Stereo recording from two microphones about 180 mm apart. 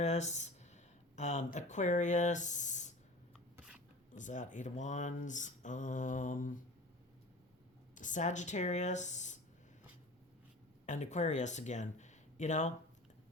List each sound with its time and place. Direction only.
0.0 s speech: 40° left (ahead or behind)
4.1 s speech: 45° left (ahead or behind)
7.9 s speech: 45° left (ahead or behind)
10.8 s speech: 40° left (ahead or behind)